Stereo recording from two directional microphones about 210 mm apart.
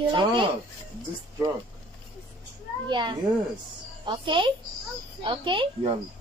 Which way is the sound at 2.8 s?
20° right (ahead or behind).